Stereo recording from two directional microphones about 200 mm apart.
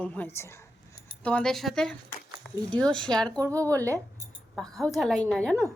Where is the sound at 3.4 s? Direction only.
15° right (ahead or behind).